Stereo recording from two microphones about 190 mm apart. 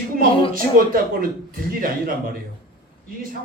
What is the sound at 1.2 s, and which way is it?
A man's voice, 50° right (ahead or behind).